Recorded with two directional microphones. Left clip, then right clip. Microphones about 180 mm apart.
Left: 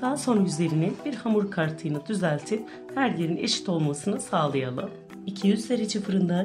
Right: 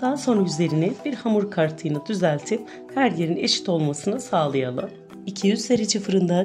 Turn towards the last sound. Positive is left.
turn(degrees=-30)  # may be behind; listen again after turning